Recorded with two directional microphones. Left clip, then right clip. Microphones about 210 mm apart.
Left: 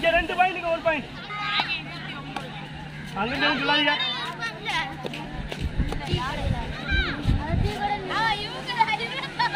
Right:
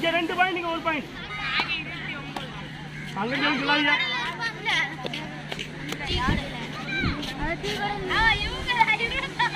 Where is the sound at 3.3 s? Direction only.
55° left (ahead or behind).